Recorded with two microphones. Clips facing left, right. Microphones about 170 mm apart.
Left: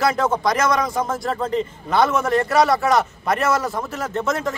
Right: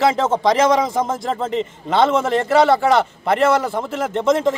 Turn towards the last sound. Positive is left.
turn(degrees=-25)  # may be behind; listen again after turning